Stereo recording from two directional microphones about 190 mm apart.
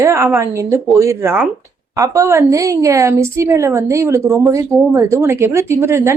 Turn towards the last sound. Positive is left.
turn(degrees=-15)  # may be behind; listen again after turning